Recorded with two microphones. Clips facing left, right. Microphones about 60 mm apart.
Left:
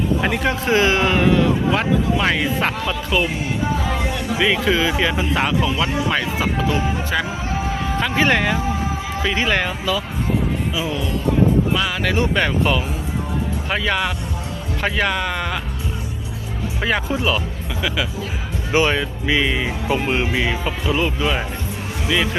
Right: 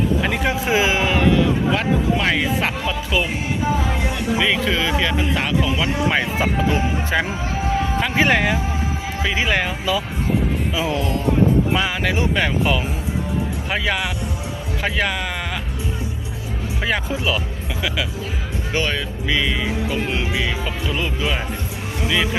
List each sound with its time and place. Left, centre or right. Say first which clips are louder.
0.3 s a man's voice: left 1 dB; centre
4.4 s a man's voice: left 3 dB; centre
6.1 s speech: right 1 dB; centre
7.9 s speech: left 1 dB; centre
10.8 s speech: right 2 dB; right
11.7 s a man's voice: even; centre
16.8 s a man's voice: left 2 dB; centre
18.7 s speech: left 5 dB; centre
20.7 s a man's voice: left 3 dB; centre